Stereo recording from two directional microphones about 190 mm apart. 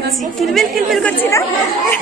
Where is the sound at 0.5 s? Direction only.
5° left (ahead or behind).